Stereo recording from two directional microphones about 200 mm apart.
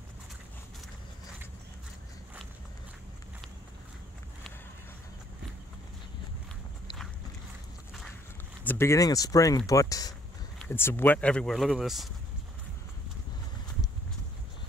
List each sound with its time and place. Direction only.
8.6 s speech: 15° left (ahead or behind)